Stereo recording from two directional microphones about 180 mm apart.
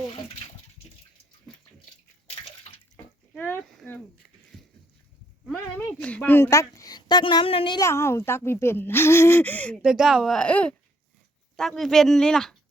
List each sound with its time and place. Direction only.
3.3 s a sound: 10° left (ahead or behind)
5.5 s a woman's voice: 5° left (ahead or behind); by 7.8 s 30° left (ahead or behind)
7.8 s speech: 15° left (ahead or behind)